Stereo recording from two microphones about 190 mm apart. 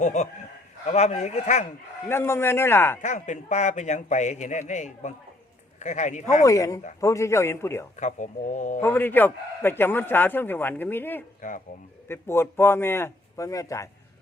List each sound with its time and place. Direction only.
0.0 s a man's voice: 40° left (ahead or behind)
2.0 s a man's voice: 10° left (ahead or behind)
3.0 s a man's voice: 40° left (ahead or behind)
6.4 s a man's voice: 15° left (ahead or behind)
7.9 s a man's voice: 40° left (ahead or behind)
8.8 s a man's voice: 10° left (ahead or behind)